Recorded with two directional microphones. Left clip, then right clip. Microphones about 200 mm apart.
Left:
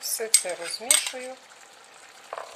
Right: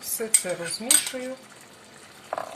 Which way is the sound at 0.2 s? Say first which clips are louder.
Left 2 dB; 40° left (ahead or behind).